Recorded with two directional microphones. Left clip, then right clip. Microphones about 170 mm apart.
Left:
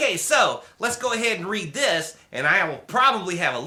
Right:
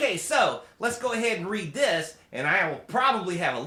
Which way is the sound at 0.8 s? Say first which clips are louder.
Left 3 dB; 20° left (ahead or behind).